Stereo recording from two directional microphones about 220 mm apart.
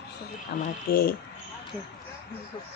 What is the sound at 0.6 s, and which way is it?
Speech, 40° left (ahead or behind).